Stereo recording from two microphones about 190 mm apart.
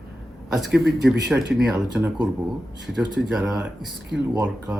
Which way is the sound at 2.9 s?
5° right (ahead or behind).